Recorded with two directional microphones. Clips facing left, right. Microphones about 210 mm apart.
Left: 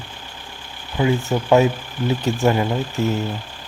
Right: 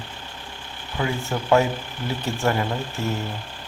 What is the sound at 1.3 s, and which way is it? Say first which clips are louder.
Speech: left 2 dB; 20° left (ahead or behind).